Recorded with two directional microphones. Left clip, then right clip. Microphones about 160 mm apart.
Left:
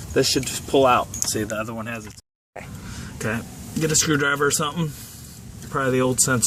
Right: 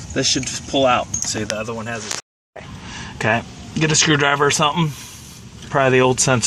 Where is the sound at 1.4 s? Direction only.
50° right (ahead or behind).